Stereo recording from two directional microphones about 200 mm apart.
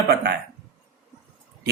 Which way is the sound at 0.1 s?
55° right (ahead or behind).